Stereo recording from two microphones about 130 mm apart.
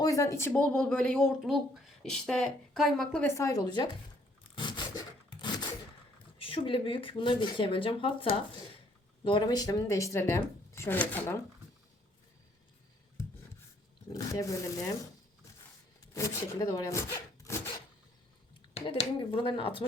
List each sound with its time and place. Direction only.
0.0 s speech: 25° left (ahead or behind)
0.5 s speech: 10° left (ahead or behind)
3.2 s speech: 25° left (ahead or behind)
4.5 s zipper: 35° left (ahead or behind)
6.4 s speech: 45° left (ahead or behind)
9.2 s speech: 35° left (ahead or behind); by 11.3 s 10° left (ahead or behind)
14.1 s speech: 25° left (ahead or behind)
16.1 s speech: 25° left (ahead or behind)
18.9 s speech: 45° left (ahead or behind)